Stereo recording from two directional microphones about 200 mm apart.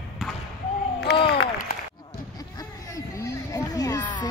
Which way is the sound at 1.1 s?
55° left (ahead or behind).